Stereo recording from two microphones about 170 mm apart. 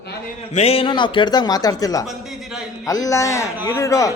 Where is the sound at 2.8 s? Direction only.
20° left (ahead or behind).